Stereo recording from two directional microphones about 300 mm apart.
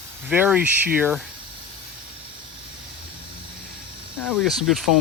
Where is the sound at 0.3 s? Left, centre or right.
Centre.